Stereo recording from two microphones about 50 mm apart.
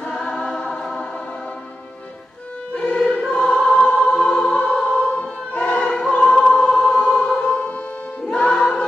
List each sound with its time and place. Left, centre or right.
0.0 s music: centre
2.7 s music: left
3.3 s choir: centre; by 5.9 s left
5.9 s choir: centre
8.3 s music: left